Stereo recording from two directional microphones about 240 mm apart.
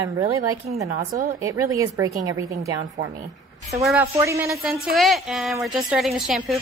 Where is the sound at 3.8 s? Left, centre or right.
Centre.